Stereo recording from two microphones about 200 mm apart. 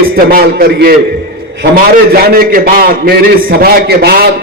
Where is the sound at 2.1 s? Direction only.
50° right (ahead or behind).